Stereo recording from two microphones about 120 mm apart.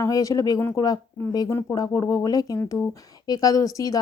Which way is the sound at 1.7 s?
30° left (ahead or behind).